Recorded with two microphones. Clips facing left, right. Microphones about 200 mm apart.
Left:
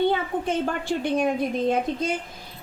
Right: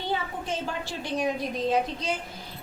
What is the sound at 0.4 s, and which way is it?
A woman's voice, 55° left (ahead or behind).